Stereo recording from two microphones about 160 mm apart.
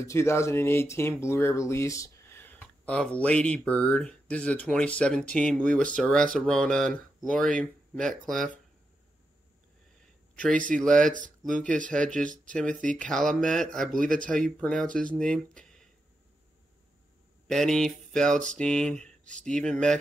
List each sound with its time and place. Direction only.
0.0 s speech: 15° left (ahead or behind)
10.3 s speech: 5° left (ahead or behind)
13.9 s speech: 60° right (ahead or behind)
14.2 s speech: 5° left (ahead or behind)
17.5 s speech: 5° left (ahead or behind)